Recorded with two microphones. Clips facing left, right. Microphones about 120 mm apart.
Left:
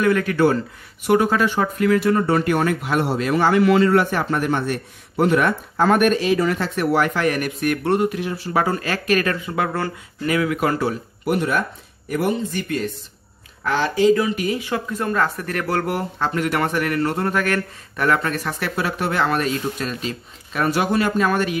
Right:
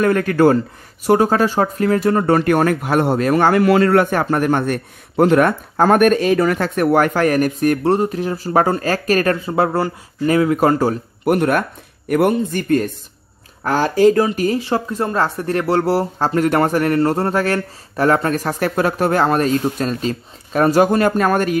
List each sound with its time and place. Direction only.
0.0 s speech: 45° right (ahead or behind)